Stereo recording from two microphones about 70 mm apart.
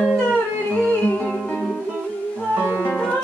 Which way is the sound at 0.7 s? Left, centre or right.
Centre.